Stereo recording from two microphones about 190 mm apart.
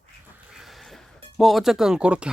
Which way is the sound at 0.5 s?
Centre (ahead or behind).